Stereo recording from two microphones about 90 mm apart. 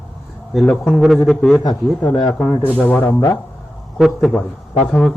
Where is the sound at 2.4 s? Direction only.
20° left (ahead or behind).